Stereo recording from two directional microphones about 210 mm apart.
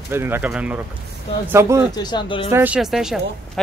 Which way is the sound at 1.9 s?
20° left (ahead or behind).